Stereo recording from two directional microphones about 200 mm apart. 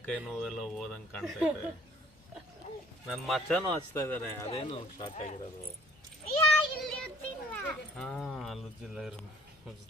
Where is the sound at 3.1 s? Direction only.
Centre (ahead or behind).